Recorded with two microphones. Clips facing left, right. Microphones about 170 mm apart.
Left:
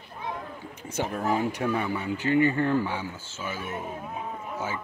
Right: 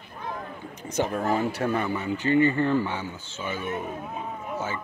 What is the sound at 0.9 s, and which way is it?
Speech, 5° left (ahead or behind).